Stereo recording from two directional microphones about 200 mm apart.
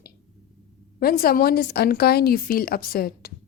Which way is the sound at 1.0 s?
50° left (ahead or behind).